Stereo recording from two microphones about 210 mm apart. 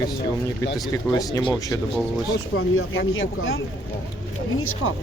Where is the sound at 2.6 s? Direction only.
75° left (ahead or behind).